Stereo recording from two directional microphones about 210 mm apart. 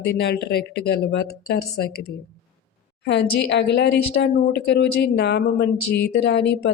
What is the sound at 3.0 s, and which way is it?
A woman's voice, 55° left (ahead or behind).